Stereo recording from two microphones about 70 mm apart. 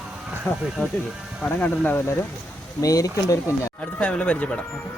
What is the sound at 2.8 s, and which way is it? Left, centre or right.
Speech, left.